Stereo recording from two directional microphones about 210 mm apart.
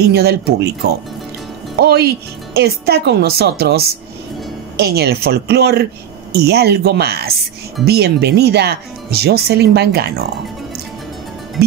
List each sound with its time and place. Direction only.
0.0 s speech: 50° right (ahead or behind)
1.8 s speech: 50° right (ahead or behind)